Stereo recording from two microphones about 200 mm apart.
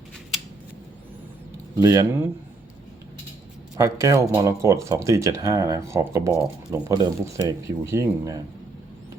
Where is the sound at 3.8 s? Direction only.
15° right (ahead or behind).